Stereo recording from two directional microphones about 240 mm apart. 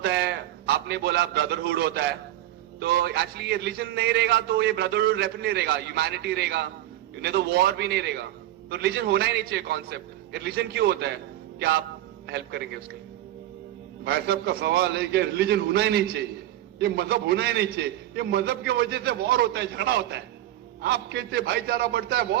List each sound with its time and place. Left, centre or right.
0.0 s a man's voice: right
12.3 s a man's voice: right
14.0 s a man's voice: right